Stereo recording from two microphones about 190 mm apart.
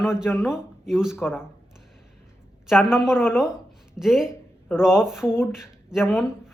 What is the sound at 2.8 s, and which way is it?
A man's voice, 5° right (ahead or behind).